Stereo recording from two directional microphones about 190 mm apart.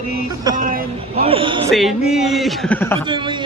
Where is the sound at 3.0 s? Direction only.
25° right (ahead or behind).